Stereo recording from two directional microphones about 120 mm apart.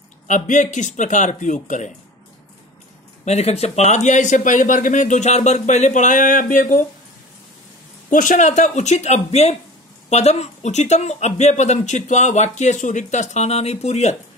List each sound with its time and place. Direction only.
0.3 s speech: 90° left
3.3 s speech: 60° left (ahead or behind); by 6.8 s 90° left
8.1 s speech: 90° left; by 14.1 s 65° left (ahead or behind)